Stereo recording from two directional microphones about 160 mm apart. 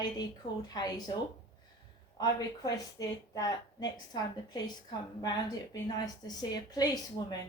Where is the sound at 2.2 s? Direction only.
25° left (ahead or behind).